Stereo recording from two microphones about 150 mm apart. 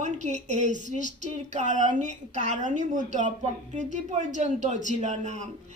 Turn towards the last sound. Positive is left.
turn(degrees=-50)  # may be behind; listen again after turning